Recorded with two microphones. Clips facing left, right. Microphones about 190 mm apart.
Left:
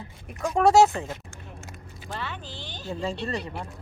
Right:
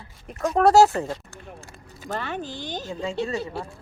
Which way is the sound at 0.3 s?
Centre (ahead or behind).